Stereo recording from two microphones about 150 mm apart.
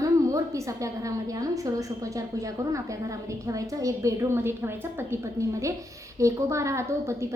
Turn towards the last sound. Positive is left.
turn(degrees=-20)  # may be behind; listen again after turning